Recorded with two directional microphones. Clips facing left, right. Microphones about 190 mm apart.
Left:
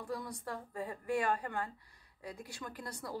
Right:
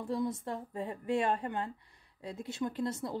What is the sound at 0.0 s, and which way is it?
A woman's voice, 25° right (ahead or behind).